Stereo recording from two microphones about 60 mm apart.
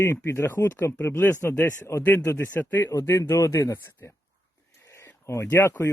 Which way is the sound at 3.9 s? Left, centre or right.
Left.